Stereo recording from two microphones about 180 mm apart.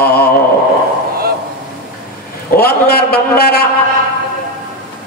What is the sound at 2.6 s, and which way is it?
A man's voice, 60° left (ahead or behind).